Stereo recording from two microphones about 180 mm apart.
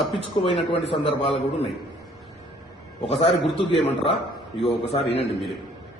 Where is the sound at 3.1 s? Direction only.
35° left (ahead or behind).